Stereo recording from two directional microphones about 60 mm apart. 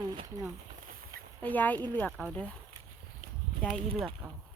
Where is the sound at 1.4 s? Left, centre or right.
Left.